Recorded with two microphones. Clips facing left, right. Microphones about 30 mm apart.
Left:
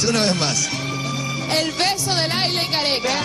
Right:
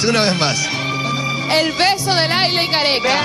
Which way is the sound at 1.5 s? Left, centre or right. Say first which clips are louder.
Right 5 dB; right.